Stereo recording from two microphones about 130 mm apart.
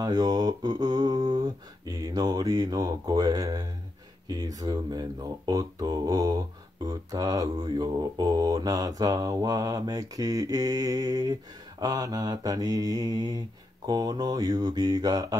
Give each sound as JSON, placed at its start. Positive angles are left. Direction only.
{"t": 0.0, "sound": "speech", "side_deg": -30}